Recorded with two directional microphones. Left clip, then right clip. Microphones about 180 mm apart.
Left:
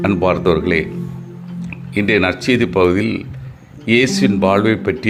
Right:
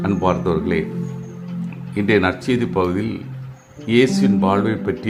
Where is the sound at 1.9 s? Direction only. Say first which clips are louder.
Left 2 dB; 15° left (ahead or behind).